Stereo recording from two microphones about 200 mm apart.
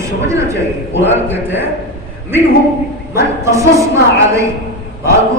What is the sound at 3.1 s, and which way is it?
A woman's voice, 15° right (ahead or behind).